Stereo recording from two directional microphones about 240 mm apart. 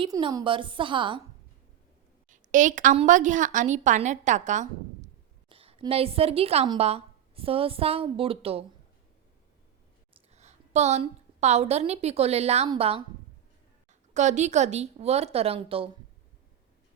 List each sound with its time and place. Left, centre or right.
0.0 s a woman's voice: centre
2.3 s a woman's voice: right
10.3 s a woman's voice: right
14.1 s a woman's voice: right